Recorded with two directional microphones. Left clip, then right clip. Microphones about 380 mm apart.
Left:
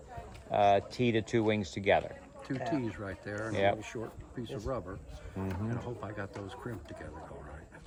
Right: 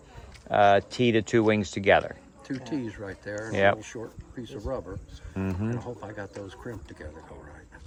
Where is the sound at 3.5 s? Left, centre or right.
Right.